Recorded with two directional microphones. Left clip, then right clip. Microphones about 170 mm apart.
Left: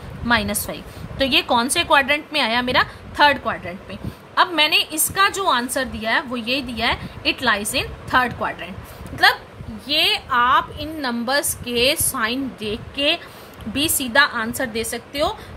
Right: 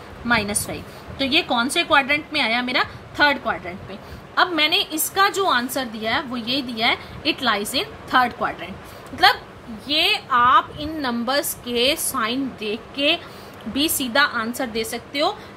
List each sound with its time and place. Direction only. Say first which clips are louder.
0.3 s a woman's voice: left 1 dB; 35° left (ahead or behind); by 15.3 s 20° left (ahead or behind)